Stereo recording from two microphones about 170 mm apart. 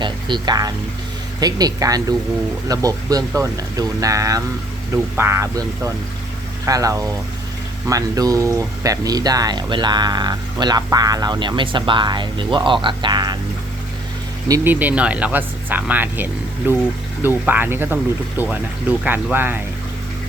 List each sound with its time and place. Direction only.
0.0 s speech: 25° right (ahead or behind)
14.4 s speech: 15° right (ahead or behind)